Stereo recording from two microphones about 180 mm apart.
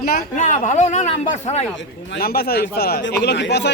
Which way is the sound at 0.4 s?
40° left (ahead or behind).